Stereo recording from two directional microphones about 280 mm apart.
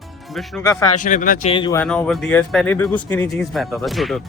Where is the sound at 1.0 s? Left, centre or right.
Left; by 3.4 s centre.